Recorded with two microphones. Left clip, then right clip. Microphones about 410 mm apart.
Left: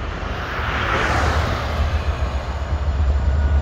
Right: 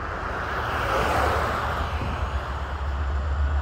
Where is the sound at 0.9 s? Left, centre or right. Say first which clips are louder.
Left 2 dB; right.